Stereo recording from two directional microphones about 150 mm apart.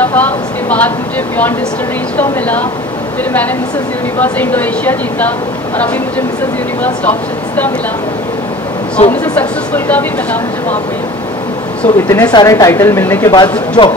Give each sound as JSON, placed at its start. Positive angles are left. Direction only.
{"t": 0.0, "sound": "a woman's voice", "side_deg": 10}
{"t": 2.1, "sound": "a woman's voice", "side_deg": 10}
{"t": 4.2, "sound": "a woman's voice", "side_deg": 10}
{"t": 6.8, "sound": "a woman's voice", "side_deg": 10}
{"t": 9.2, "sound": "a woman's voice", "side_deg": 10}
{"t": 11.8, "sound": "a woman's voice", "side_deg": 15}
{"t": 12.3, "sound": "speech", "side_deg": 25}
{"t": 13.3, "sound": "speech", "side_deg": 30}